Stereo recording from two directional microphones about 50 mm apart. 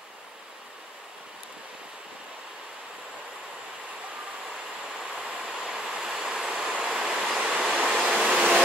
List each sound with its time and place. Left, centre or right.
4.8 s vehicle: centre
7.3 s train: centre
8.3 s vehicle: centre